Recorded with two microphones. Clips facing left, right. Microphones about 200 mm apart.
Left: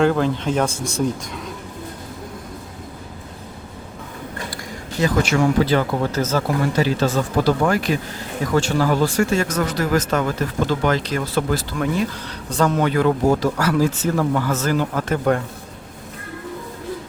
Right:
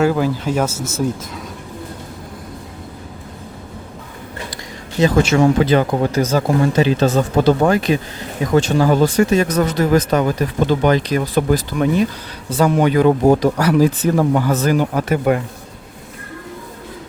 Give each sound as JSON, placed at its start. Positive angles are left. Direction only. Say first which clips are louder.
{"t": 0.0, "sound": "speech", "louder": "right 1 dB", "side_deg": -5}
{"t": 4.5, "sound": "speech", "louder": "right 8 dB", "side_deg": -25}